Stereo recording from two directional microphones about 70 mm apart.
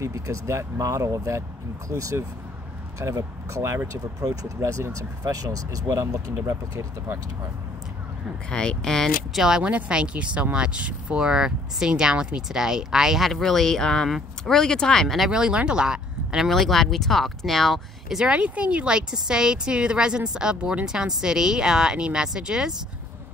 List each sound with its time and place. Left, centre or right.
0.0 s speech: right
8.5 s speech: centre
9.6 s speech: centre
15.2 s speech: centre
16.4 s speech: centre